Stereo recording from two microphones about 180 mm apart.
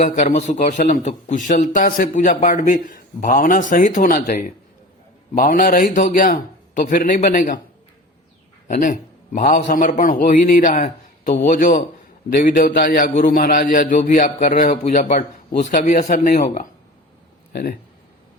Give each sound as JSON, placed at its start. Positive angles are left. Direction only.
{"t": 0.0, "sound": "a man's voice", "side_deg": 40}
{"t": 8.6, "sound": "a man's voice", "side_deg": 45}
{"t": 17.5, "sound": "speech", "side_deg": 55}